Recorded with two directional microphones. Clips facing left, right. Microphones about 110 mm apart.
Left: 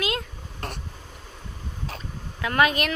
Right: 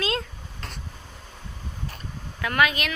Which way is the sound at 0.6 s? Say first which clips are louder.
Left 7 dB; 55° left (ahead or behind).